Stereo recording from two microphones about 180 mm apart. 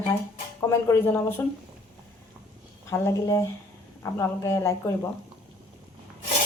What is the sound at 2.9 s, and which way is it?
A man's voice, 15° left (ahead or behind).